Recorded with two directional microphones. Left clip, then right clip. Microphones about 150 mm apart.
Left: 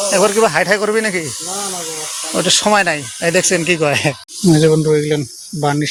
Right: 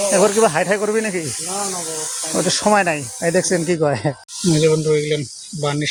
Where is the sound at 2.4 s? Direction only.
10° right (ahead or behind).